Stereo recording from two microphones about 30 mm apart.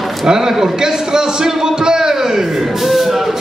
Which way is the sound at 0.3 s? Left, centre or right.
Centre.